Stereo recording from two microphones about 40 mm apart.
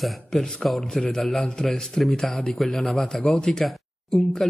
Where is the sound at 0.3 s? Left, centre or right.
Centre.